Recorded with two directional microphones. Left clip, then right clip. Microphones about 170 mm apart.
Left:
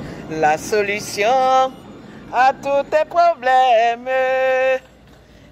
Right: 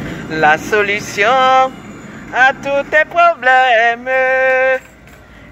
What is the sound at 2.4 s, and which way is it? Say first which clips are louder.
Speech: right 4 dB; 40° left (ahead or behind).